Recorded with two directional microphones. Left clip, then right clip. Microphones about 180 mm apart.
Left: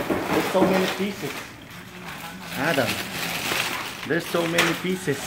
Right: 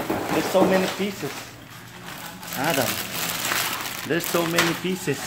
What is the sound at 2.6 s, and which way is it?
Crumpling, centre (ahead or behind).